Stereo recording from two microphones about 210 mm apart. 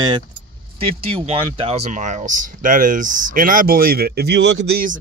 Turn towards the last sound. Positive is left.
turn(degrees=-50)  # may be behind; listen again after turning